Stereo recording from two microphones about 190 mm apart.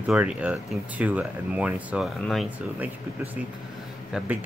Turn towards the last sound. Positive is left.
turn(degrees=-10)  # may be behind; listen again after turning